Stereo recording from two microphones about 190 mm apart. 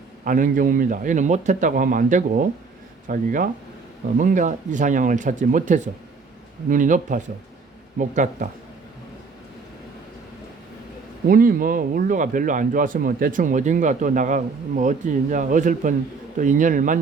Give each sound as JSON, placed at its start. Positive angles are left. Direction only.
{"t": 0.3, "sound": "speech", "side_deg": -45}
{"t": 11.3, "sound": "speech", "side_deg": -50}